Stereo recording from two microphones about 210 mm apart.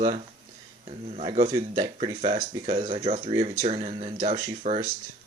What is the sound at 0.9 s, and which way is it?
Speech, 30° right (ahead or behind).